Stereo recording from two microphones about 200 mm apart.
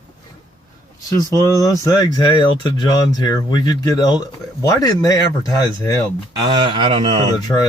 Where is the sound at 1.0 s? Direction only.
15° left (ahead or behind).